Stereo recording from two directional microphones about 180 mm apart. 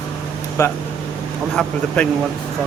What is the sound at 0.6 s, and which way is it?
Speech, 15° left (ahead or behind).